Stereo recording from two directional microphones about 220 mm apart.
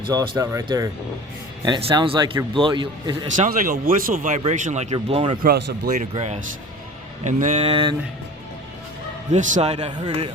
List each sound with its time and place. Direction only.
0.0 s a man's voice: 15° right (ahead or behind)
3.3 s speech: 40° right (ahead or behind)
5.4 s speech: 40° right (ahead or behind)
9.3 s a man's voice: 35° right (ahead or behind)